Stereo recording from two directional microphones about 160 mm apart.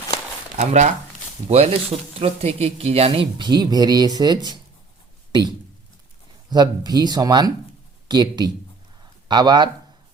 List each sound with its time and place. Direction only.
0.5 s speech: 45° right (ahead or behind); by 9.6 s 25° right (ahead or behind)